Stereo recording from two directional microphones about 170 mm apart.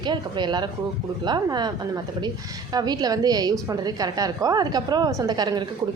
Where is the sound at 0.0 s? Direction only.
25° right (ahead or behind).